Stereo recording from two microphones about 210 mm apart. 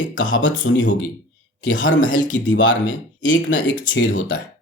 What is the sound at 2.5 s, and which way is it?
Speech, 65° left (ahead or behind).